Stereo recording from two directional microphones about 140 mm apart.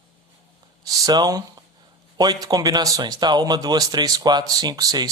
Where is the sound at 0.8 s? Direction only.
25° right (ahead or behind).